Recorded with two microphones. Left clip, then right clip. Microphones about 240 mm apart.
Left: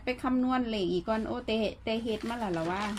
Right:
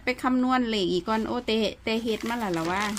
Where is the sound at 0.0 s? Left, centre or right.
Right.